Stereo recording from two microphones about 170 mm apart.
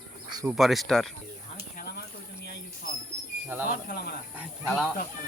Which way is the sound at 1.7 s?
65° left (ahead or behind).